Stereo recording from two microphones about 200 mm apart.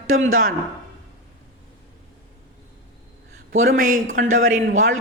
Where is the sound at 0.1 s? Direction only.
90° right.